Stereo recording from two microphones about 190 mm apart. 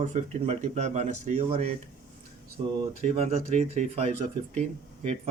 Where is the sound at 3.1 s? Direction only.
35° right (ahead or behind).